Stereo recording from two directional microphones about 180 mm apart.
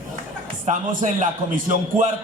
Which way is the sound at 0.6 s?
45° right (ahead or behind).